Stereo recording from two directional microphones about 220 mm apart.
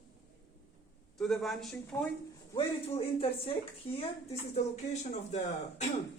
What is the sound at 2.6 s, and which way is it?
A woman's voice, 25° left (ahead or behind).